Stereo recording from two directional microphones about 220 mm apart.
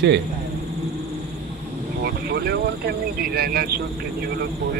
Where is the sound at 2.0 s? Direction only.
45° right (ahead or behind).